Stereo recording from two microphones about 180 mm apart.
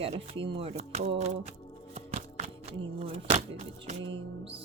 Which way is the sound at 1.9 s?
35° right (ahead or behind).